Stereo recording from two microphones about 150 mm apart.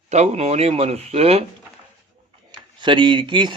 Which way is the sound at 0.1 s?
45° right (ahead or behind).